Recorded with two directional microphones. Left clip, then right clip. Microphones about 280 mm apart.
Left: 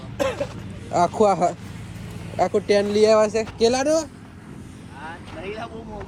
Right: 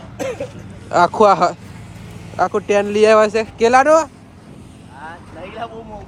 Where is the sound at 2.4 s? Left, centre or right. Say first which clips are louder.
Right 3 dB; centre.